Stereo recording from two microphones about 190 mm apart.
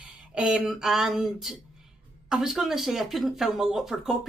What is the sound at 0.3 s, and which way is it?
Speech, 5° right (ahead or behind).